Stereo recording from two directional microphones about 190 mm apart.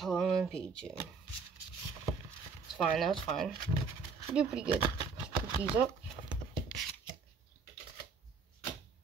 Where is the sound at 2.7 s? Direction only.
Centre (ahead or behind).